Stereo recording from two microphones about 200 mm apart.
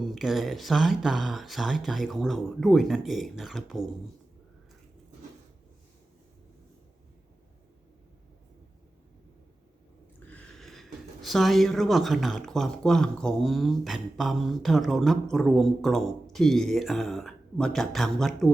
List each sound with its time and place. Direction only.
0.0 s speech: centre (ahead or behind)
10.2 s speech: 5° left (ahead or behind)